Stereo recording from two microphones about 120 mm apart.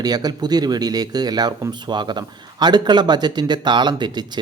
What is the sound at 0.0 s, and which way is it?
Speech, 35° right (ahead or behind).